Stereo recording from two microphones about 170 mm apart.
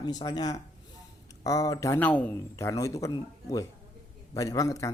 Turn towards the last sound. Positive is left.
turn(degrees=20)  # may be behind; listen again after turning